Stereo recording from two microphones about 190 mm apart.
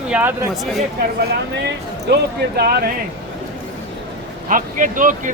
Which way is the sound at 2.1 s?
55° right (ahead or behind).